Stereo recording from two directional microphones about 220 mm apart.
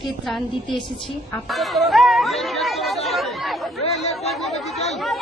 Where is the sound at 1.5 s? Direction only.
Centre (ahead or behind).